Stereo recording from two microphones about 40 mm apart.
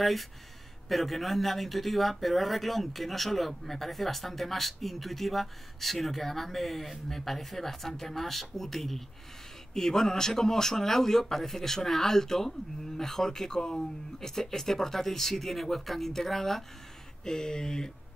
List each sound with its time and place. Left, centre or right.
0.0 s speech: centre